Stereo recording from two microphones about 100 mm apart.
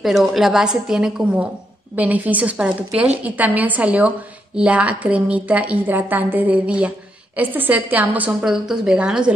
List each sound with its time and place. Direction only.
0.0 s a woman's voice: 5° right (ahead or behind)